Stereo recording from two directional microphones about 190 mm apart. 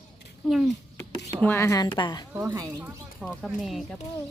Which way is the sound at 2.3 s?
15° right (ahead or behind).